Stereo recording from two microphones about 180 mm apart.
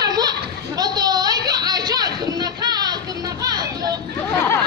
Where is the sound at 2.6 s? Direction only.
20° right (ahead or behind).